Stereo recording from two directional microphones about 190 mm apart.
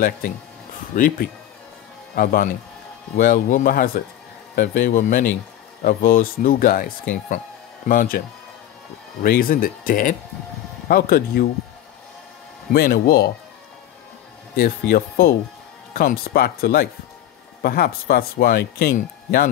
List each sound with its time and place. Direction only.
0.9 s speech: 45° left (ahead or behind)
9.2 s speech: 50° left (ahead or behind)
12.7 s speech: 55° left (ahead or behind)
14.6 s speech: 50° left (ahead or behind)